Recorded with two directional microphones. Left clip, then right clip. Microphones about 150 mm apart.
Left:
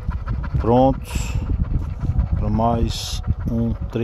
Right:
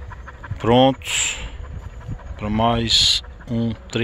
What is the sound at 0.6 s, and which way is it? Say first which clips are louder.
Speech: right 1 dB; 10° left (ahead or behind).